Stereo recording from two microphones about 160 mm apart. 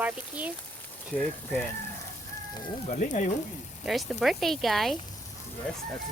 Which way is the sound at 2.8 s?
45° left (ahead or behind).